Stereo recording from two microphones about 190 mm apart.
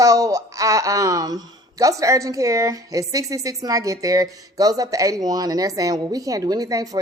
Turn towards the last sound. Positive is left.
turn(degrees=-20)  # may be behind; listen again after turning